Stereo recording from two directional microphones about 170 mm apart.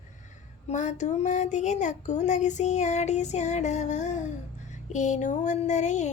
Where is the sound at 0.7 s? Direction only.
45° left (ahead or behind).